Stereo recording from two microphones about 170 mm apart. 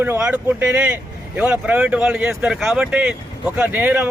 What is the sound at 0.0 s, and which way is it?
Speech, 10° right (ahead or behind).